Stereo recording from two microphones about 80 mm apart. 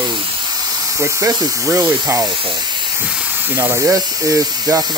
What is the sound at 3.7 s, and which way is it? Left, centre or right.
Speech, right.